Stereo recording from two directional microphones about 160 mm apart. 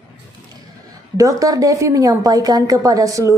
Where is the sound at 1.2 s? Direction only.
20° right (ahead or behind).